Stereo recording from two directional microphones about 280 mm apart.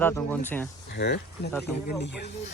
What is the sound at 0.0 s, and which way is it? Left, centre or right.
Speech, centre.